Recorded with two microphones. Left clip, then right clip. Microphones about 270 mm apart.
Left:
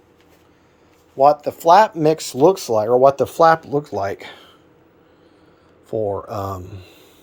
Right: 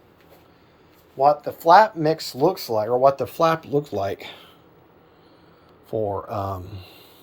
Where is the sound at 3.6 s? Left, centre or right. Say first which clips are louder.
Left 2 dB; centre.